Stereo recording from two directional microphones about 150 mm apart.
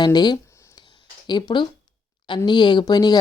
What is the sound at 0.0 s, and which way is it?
Speech, 30° left (ahead or behind).